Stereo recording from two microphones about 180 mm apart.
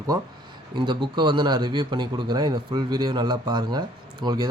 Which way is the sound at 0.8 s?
25° right (ahead or behind).